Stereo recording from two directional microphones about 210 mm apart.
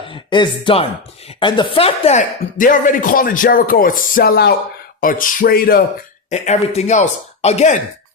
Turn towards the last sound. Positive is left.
turn(degrees=30)  # may be behind; listen again after turning